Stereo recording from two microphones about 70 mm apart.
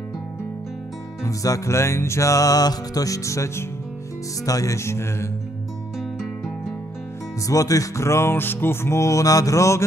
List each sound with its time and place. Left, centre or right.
1.2 s music: left
7.4 s music: left